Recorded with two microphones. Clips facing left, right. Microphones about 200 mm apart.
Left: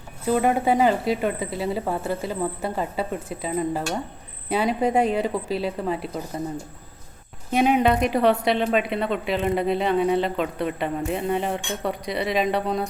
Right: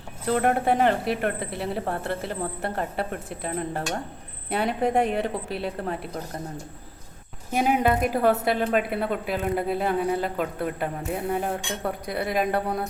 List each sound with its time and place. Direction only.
0.3 s speech: 5° left (ahead or behind)
1.0 s speech: 60° right (ahead or behind)
1.6 s speech: centre (ahead or behind)
7.6 s a woman's voice: 10° right (ahead or behind)